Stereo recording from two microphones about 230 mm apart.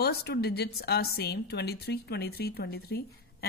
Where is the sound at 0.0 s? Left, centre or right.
Left.